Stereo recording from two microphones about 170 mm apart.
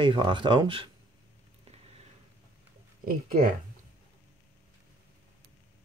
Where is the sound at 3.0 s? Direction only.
55° right (ahead or behind).